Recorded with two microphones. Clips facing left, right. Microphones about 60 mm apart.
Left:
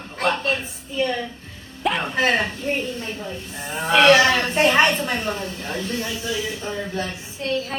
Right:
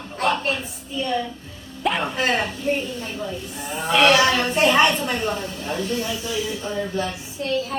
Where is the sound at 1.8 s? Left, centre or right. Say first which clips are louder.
Even; centre.